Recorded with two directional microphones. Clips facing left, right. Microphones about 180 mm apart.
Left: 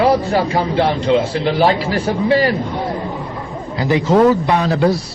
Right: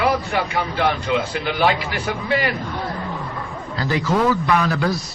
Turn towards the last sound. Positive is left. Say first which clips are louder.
# left 5 dB
turn(degrees=30)  # may be behind; listen again after turning